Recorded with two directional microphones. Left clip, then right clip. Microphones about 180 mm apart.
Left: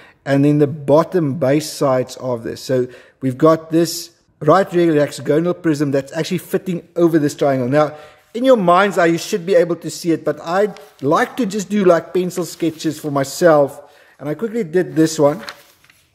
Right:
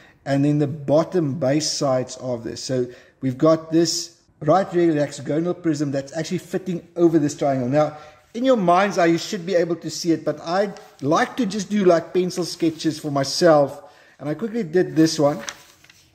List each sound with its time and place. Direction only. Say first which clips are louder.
0.2 s a man's voice: left 6 dB; 35° left (ahead or behind)